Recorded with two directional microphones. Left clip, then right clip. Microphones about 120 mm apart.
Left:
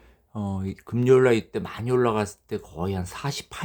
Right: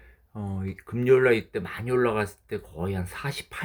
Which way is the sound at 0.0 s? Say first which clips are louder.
Left 5 dB; 45° left (ahead or behind).